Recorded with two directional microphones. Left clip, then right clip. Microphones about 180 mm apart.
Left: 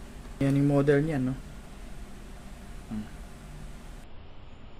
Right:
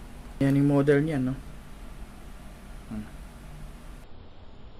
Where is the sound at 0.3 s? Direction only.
5° right (ahead or behind).